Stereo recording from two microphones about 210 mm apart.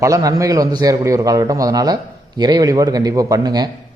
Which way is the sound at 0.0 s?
15° right (ahead or behind).